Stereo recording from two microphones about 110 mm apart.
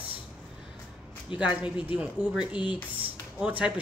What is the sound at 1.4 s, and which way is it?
Speech, 15° right (ahead or behind).